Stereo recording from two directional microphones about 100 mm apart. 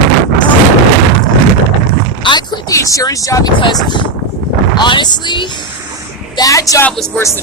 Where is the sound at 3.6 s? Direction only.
50° left (ahead or behind).